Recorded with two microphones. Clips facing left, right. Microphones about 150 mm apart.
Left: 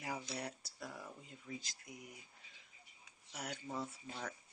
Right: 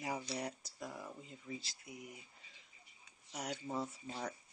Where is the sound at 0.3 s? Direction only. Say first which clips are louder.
Right 3 dB; 5° right (ahead or behind).